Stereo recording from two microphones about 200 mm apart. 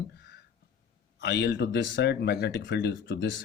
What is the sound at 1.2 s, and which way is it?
Speech, 60° left (ahead or behind).